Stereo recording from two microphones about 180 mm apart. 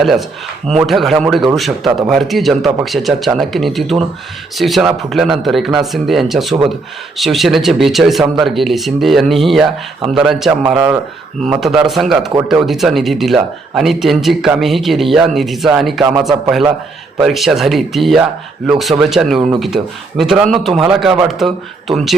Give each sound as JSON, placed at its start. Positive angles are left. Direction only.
{"t": 0.0, "sound": "speech", "side_deg": 0}